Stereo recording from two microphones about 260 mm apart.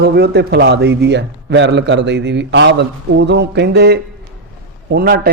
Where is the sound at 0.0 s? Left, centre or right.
Right.